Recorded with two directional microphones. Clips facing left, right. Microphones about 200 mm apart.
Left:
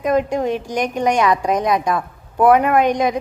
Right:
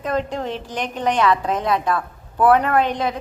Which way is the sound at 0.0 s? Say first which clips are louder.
Left 6 dB; 10° left (ahead or behind).